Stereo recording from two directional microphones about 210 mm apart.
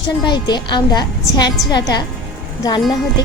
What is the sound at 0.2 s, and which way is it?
A woman's voice, 20° left (ahead or behind).